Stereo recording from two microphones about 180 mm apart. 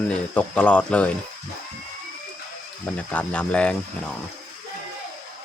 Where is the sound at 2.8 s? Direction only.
10° left (ahead or behind).